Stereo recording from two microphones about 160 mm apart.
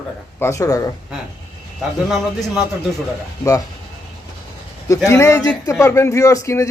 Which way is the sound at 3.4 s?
20° left (ahead or behind).